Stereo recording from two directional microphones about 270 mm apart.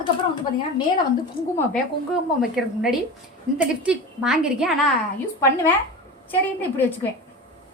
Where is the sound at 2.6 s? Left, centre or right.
Centre.